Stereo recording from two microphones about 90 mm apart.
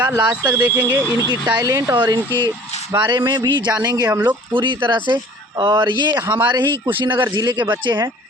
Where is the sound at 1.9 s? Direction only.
50° right (ahead or behind).